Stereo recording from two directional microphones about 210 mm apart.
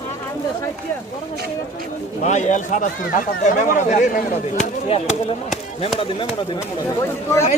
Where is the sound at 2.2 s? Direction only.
35° left (ahead or behind).